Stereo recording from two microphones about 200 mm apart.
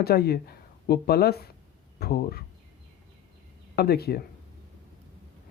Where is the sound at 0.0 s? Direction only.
50° left (ahead or behind).